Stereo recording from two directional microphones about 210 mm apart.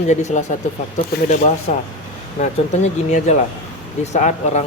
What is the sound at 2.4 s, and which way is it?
Speech, 35° left (ahead or behind).